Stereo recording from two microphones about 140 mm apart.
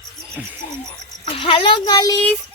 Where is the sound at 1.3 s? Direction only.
40° left (ahead or behind).